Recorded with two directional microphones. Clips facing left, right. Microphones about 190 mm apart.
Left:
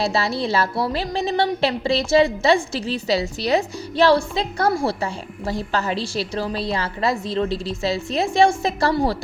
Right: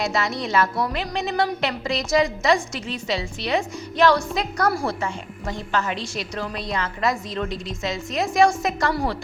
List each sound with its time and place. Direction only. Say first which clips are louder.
0.0 s a woman's voice: left 3 dB; 30° left (ahead or behind)